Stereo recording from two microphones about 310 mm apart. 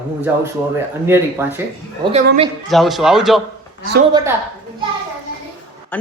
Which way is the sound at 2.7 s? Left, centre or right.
Centre.